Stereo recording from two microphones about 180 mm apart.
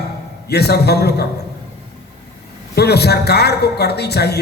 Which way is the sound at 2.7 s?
65° left (ahead or behind).